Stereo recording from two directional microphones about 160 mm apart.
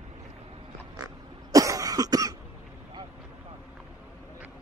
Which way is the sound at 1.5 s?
20° right (ahead or behind).